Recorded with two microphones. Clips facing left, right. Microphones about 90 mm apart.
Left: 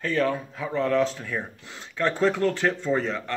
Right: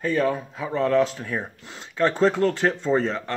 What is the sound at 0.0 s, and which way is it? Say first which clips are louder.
Speech: right 2 dB; 15° right (ahead or behind).